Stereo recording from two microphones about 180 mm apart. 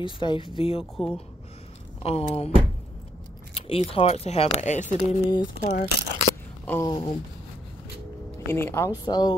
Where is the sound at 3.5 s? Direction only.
30° left (ahead or behind).